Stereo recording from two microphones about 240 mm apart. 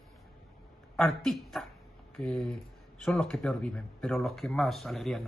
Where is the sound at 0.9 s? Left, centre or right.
Centre.